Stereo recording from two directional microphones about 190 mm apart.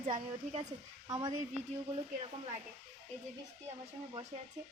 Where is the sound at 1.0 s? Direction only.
20° right (ahead or behind).